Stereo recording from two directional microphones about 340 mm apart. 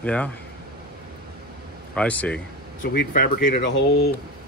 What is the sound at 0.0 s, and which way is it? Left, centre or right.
Speech, centre.